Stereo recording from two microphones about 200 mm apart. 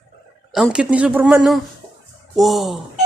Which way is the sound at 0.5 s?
5° right (ahead or behind).